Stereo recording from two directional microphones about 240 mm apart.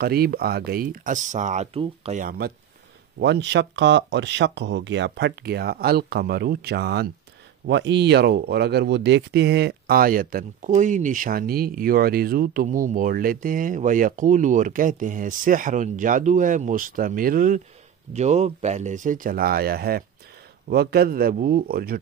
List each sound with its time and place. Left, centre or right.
0.0 s speech: right